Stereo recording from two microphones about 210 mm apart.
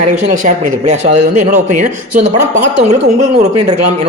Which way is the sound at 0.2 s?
35° right (ahead or behind).